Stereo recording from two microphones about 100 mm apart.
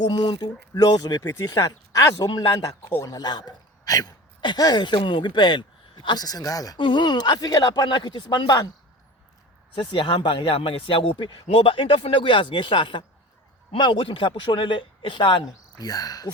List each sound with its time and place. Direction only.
0.0 s speech: 50° left (ahead or behind)
1.2 s speech: 25° left (ahead or behind)
1.5 s a man's voice: 35° left (ahead or behind)
6.7 s speech: 55° left (ahead or behind)
9.7 s a man's voice: 55° left (ahead or behind)
11.4 s a man's voice: 65° left (ahead or behind); by 15.9 s 50° left (ahead or behind)
15.9 s speech: 40° left (ahead or behind)